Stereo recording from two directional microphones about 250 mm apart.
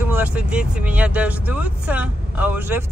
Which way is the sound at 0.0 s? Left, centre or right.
Centre.